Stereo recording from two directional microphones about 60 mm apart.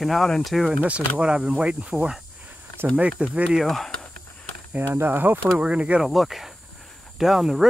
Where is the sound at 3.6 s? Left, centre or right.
Centre.